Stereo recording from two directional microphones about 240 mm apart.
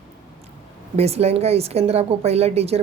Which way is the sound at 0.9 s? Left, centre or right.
Right.